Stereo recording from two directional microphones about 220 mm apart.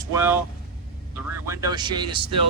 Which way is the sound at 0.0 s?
10° right (ahead or behind).